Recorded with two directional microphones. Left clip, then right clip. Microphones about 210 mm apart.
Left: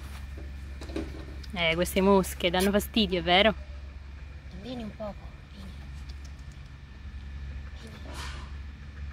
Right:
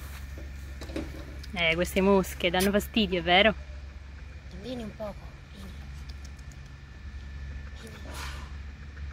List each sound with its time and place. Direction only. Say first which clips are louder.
1.5 s speech: even; 10° left (ahead or behind)
4.6 s speech: right 1 dB; 40° right (ahead or behind)